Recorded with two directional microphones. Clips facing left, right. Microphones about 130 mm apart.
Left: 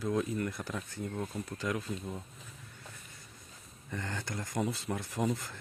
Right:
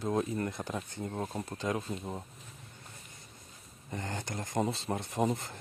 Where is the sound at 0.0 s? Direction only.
30° right (ahead or behind).